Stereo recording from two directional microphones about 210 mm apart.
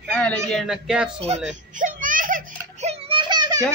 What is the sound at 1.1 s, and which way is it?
Speech, 30° right (ahead or behind).